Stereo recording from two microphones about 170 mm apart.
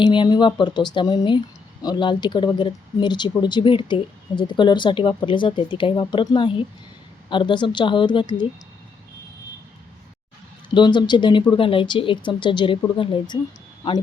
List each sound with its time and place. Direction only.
0.0 s speech: 25° left (ahead or behind)
10.8 s speech: 25° left (ahead or behind)